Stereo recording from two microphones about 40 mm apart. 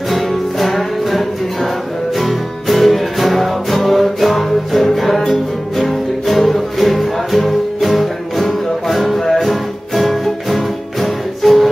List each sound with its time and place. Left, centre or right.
0.1 s music: centre